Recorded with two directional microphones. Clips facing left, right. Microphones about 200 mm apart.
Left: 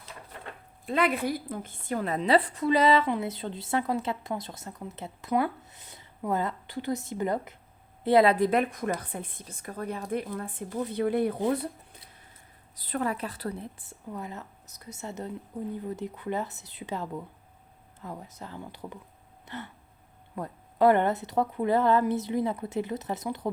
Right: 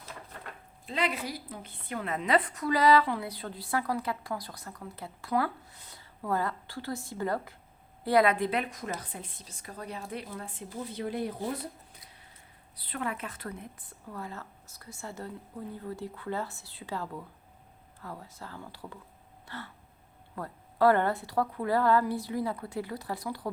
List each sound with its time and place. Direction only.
0.9 s a woman's voice: 55° left (ahead or behind); by 8.4 s 25° left (ahead or behind)
8.4 s a woman's voice: 45° left (ahead or behind)
12.8 s a woman's voice: 40° left (ahead or behind); by 18.9 s 20° left (ahead or behind)
19.5 s a sound: 20° left (ahead or behind)
20.3 s a woman's voice: 20° left (ahead or behind)